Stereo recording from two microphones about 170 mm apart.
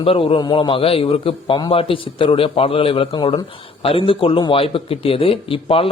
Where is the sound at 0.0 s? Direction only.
30° left (ahead or behind).